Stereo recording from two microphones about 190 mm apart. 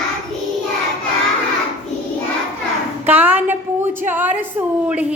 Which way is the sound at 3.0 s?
10° right (ahead or behind).